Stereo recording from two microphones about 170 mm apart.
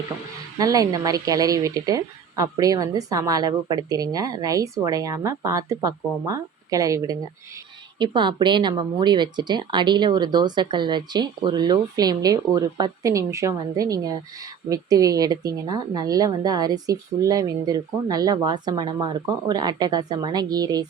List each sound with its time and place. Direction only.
0.6 s a woman's voice: 20° right (ahead or behind)